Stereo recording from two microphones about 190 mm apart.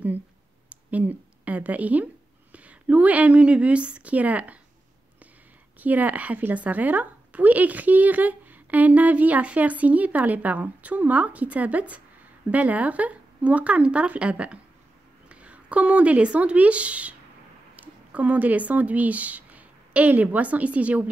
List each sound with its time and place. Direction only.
0.7 s a sound: 5° right (ahead or behind)
2.5 s a woman's voice: 5° right (ahead or behind)
5.8 s a woman's voice: 10° right (ahead or behind)